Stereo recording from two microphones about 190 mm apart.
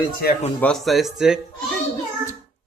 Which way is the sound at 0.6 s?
Centre (ahead or behind).